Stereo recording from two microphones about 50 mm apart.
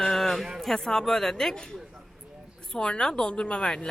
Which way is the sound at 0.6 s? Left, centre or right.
Centre.